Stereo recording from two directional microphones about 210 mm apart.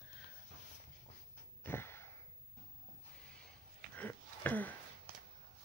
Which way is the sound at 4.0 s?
10° left (ahead or behind).